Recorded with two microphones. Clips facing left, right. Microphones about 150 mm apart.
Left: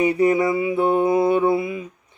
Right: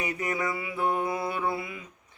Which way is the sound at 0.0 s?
25° left (ahead or behind).